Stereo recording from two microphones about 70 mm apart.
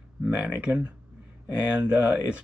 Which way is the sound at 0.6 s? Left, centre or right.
Centre.